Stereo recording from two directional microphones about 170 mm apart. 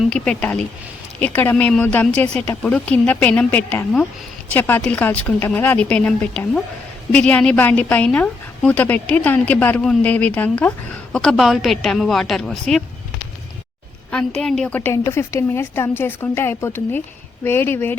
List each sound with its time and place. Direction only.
0.1 s a woman's voice: 5° left (ahead or behind)
14.1 s a woman's voice: 5° left (ahead or behind)